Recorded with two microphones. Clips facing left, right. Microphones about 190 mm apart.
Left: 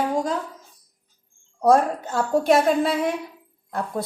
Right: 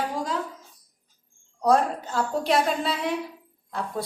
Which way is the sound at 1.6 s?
50° left (ahead or behind).